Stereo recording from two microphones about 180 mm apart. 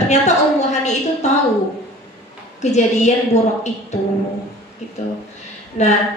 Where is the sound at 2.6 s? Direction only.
40° left (ahead or behind).